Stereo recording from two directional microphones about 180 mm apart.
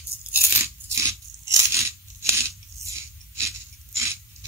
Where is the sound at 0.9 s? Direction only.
15° right (ahead or behind).